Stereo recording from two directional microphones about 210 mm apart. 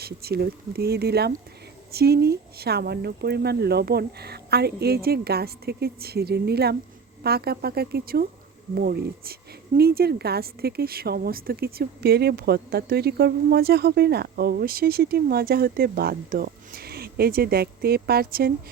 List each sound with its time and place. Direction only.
0.0 s speech: 50° right (ahead or behind)